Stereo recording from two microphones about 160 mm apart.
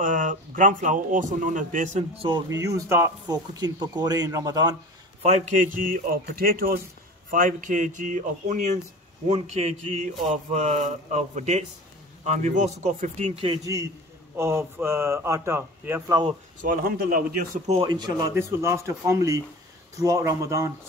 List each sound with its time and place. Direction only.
0.0 s speech: 55° right (ahead or behind)
2.1 s speech: 30° right (ahead or behind)
5.2 s speech: 45° right (ahead or behind); by 6.8 s 70° right (ahead or behind)
7.2 s speech: 55° right (ahead or behind)
13.6 s speech: 20° right (ahead or behind)
16.6 s speech: 65° right (ahead or behind)
17.8 s speech: 25° right (ahead or behind)